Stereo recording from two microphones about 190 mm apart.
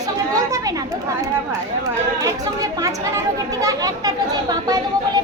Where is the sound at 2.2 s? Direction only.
15° right (ahead or behind).